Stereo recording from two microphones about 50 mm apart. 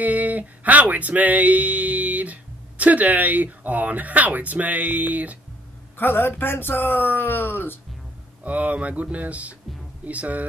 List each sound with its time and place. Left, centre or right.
0.0 s speech: right
5.9 s speech: left
8.5 s speech: right